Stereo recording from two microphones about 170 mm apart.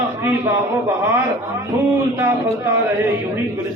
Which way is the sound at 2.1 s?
15° right (ahead or behind).